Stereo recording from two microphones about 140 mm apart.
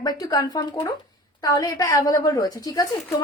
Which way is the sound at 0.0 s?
30° left (ahead or behind).